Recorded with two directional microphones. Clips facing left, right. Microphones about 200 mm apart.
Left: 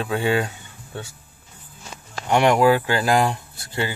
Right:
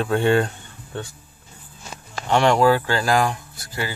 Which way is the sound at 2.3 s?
15° left (ahead or behind).